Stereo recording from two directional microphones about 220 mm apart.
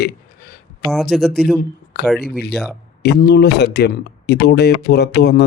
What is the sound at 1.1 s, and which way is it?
Speech, centre (ahead or behind).